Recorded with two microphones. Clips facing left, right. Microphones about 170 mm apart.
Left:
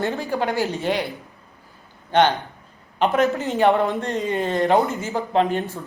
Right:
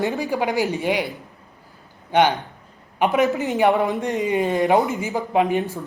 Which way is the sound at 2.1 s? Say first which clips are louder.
Even; 10° right (ahead or behind).